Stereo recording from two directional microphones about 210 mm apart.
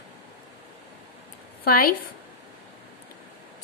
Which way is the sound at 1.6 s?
45° left (ahead or behind).